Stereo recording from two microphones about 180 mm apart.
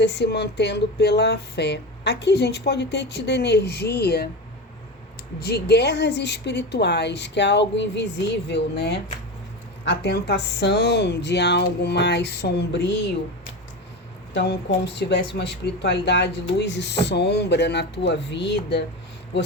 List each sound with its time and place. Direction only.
0.0 s speech: 65° left (ahead or behind)
5.4 s speech: 60° left (ahead or behind)
14.3 s speech: 70° left (ahead or behind)